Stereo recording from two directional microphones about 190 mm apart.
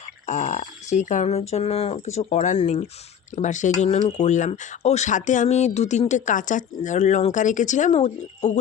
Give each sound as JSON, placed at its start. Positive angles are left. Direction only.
{"t": 0.3, "sound": "speech", "side_deg": 40}